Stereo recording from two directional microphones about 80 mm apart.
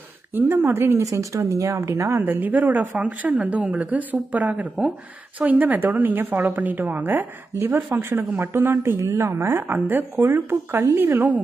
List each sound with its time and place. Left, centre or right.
0.3 s speech: right
1.0 s a woman's voice: right